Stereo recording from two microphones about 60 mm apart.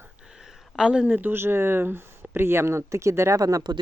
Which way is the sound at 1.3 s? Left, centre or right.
Right.